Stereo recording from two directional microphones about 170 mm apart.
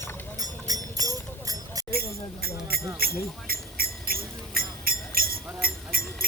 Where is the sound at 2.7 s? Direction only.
65° right (ahead or behind).